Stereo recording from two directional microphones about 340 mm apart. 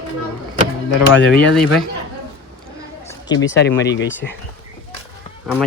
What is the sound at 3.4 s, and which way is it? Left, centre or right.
Speech, left.